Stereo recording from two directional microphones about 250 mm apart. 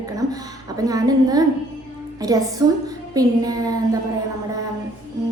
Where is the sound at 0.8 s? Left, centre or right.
Centre.